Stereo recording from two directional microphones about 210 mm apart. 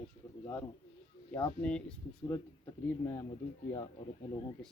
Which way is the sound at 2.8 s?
15° left (ahead or behind).